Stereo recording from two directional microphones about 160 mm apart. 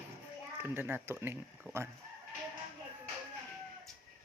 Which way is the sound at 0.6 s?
15° right (ahead or behind).